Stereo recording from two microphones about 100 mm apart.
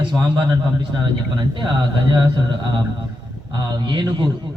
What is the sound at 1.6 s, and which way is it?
Speech, 50° right (ahead or behind).